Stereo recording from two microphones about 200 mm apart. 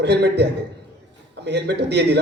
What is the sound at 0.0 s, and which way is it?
Speech, 55° right (ahead or behind).